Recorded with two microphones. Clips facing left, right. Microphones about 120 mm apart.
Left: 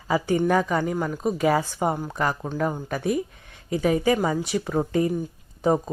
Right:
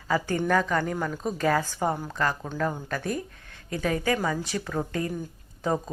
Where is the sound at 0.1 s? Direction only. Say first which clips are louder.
Left 3 dB; 10° left (ahead or behind).